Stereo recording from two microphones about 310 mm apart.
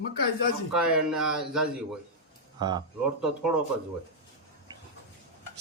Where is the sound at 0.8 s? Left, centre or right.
Centre.